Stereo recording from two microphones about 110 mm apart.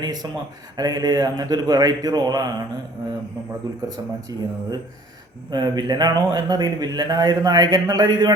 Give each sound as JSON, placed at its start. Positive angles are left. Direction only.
{"t": 0.0, "sound": "a man's voice", "side_deg": -40}
{"t": 3.8, "sound": "a man's voice", "side_deg": -35}